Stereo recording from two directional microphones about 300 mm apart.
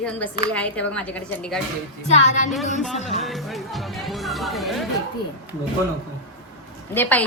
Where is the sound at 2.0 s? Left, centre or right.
Left.